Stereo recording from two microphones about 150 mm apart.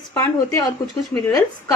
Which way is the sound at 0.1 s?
25° left (ahead or behind).